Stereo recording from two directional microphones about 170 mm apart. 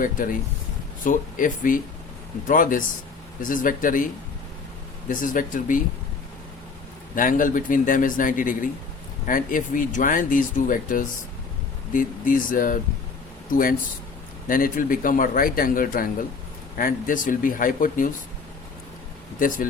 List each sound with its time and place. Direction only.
0.0 s speech: 50° left (ahead or behind)
7.2 s speech: 50° left (ahead or behind)